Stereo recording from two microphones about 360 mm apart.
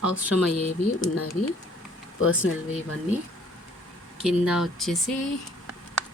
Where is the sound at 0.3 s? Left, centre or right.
Left.